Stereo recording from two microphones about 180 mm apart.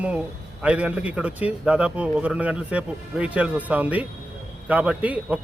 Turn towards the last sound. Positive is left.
turn(degrees=-5)  # may be behind; listen again after turning